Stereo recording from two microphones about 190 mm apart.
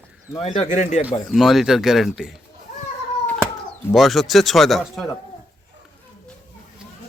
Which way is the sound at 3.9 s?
Centre (ahead or behind).